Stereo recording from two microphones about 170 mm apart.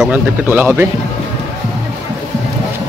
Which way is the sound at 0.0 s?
10° right (ahead or behind).